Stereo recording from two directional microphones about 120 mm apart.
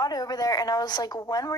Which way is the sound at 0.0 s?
35° left (ahead or behind).